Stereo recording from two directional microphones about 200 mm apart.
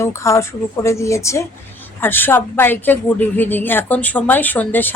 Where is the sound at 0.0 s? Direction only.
15° left (ahead or behind).